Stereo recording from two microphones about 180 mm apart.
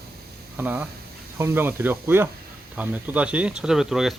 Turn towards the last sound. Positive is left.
turn(degrees=0)  # may be behind; listen again after turning